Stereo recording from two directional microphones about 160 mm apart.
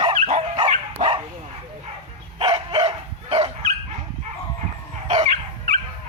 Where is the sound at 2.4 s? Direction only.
35° right (ahead or behind).